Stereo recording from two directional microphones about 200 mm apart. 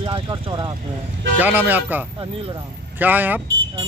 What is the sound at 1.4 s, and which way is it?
Speech, 10° right (ahead or behind).